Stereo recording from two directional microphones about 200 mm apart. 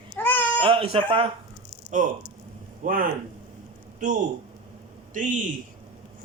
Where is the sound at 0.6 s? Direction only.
25° right (ahead or behind).